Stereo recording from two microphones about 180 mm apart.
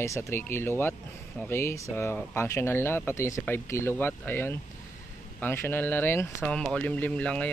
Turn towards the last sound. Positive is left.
turn(degrees=5)  # may be behind; listen again after turning